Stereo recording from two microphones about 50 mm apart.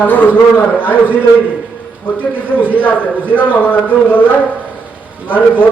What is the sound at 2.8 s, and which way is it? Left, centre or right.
A man's voice, left.